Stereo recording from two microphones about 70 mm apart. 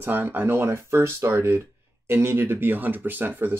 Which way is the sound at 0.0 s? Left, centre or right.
Right.